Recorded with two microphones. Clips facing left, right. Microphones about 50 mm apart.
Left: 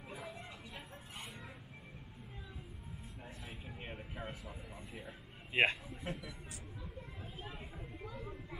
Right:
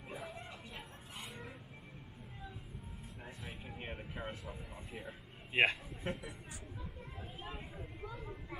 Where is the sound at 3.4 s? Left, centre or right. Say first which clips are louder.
Right 3 dB; centre.